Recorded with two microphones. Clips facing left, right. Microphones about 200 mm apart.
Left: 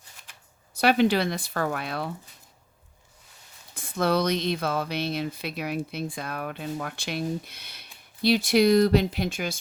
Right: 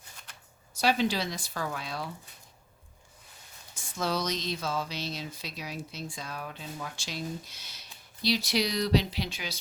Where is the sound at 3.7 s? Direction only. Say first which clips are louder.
Left 7 dB; 60° left (ahead or behind).